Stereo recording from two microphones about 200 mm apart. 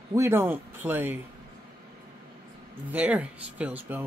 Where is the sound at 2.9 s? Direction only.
10° right (ahead or behind).